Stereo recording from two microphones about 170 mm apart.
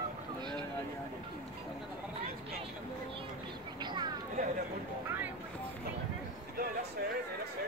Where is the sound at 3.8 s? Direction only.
25° right (ahead or behind).